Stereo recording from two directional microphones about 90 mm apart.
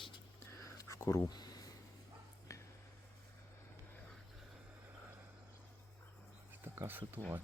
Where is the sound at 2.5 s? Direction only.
35° left (ahead or behind).